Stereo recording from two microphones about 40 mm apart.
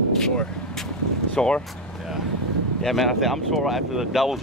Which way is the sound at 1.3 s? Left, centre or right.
Left.